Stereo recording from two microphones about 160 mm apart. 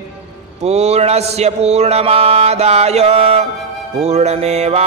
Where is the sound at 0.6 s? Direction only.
45° right (ahead or behind).